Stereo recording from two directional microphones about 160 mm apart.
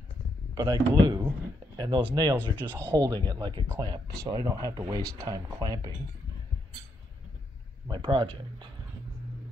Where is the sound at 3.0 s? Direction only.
20° right (ahead or behind).